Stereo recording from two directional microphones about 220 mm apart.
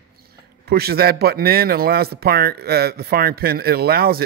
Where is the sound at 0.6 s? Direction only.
45° right (ahead or behind).